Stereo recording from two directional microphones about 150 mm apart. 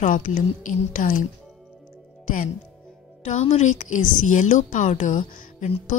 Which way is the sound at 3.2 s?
50° left (ahead or behind).